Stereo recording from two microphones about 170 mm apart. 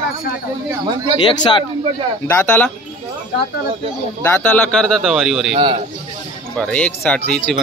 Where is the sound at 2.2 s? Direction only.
10° left (ahead or behind).